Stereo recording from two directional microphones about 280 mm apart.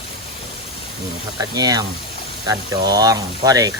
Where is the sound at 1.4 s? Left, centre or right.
Centre.